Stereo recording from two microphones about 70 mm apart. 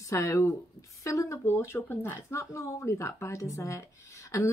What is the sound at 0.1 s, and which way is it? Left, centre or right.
A woman's voice, left.